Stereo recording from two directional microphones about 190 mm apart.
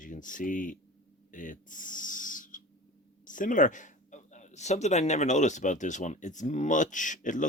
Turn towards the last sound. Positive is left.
turn(degrees=40)  # may be behind; listen again after turning